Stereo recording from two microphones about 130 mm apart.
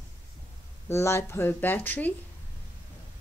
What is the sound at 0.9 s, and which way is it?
Speech, 20° left (ahead or behind).